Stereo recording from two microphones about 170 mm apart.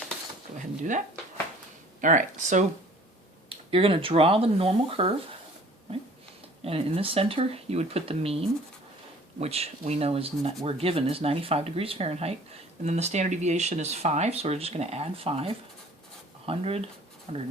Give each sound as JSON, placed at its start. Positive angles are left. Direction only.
{"t": 2.0, "sound": "speech", "side_deg": -50}
{"t": 3.5, "sound": "speech", "side_deg": -35}
{"t": 6.7, "sound": "speech", "side_deg": -35}